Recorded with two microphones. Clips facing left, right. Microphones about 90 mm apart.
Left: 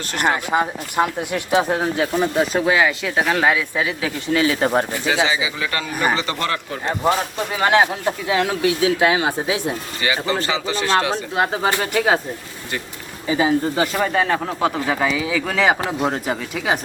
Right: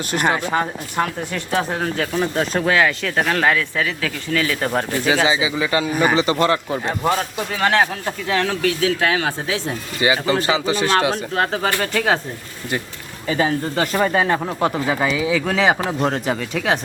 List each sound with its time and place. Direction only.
0.1 s speech: 15° right (ahead or behind)
0.5 s speech: 10° left (ahead or behind)
5.2 s speech: 20° right (ahead or behind)
7.5 s speech: 15° left (ahead or behind)
10.0 s speech: 20° right (ahead or behind)
11.1 s speech: 15° left (ahead or behind)
13.2 s speech: 10° left (ahead or behind)
13.9 s speech: centre (ahead or behind)